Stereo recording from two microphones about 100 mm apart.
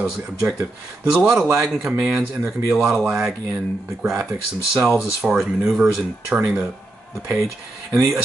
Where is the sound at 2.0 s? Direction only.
20° right (ahead or behind).